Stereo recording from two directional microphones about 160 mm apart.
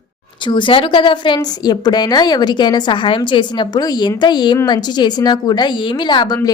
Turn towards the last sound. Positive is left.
turn(degrees=25)  # may be behind; listen again after turning